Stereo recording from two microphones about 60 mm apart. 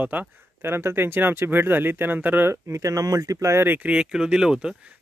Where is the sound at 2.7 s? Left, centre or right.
Right.